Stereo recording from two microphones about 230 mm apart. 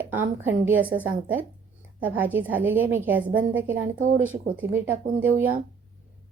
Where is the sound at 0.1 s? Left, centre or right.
Centre.